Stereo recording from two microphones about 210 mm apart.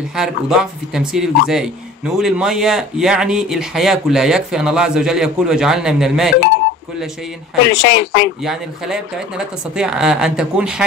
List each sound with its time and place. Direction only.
0.1 s speech: 5° right (ahead or behind)
7.7 s speech: 55° left (ahead or behind)
8.5 s speech: 5° right (ahead or behind)